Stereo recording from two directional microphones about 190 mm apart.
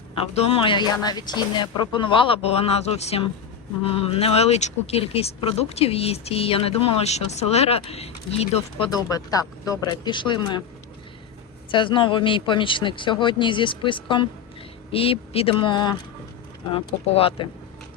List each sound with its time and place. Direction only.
0.3 s speech: 30° left (ahead or behind)
8.9 s speech: 20° left (ahead or behind)
11.7 s speech: 25° left (ahead or behind)